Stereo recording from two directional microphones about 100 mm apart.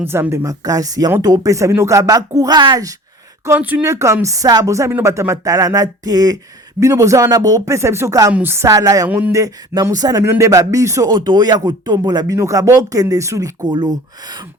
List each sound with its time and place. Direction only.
0.0 s speech: 25° right (ahead or behind); by 2.9 s 40° right (ahead or behind)
3.6 s speech: 15° right (ahead or behind)
3.8 s speech: 30° right (ahead or behind)
8.3 s a woman's voice: 20° right (ahead or behind)
8.6 s speech: 35° right (ahead or behind)
9.0 s speech: 15° right (ahead or behind)
9.3 s speech: 35° right (ahead or behind)
11.1 s speech: 45° right (ahead or behind)
13.7 s speech: 45° right (ahead or behind)